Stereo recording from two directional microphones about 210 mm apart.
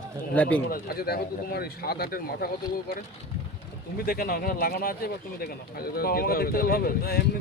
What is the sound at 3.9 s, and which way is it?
Speech, 45° left (ahead or behind).